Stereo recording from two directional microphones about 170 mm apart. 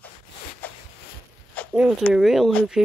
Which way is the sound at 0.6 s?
10° left (ahead or behind).